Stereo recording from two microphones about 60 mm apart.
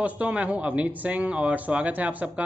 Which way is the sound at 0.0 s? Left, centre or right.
Right.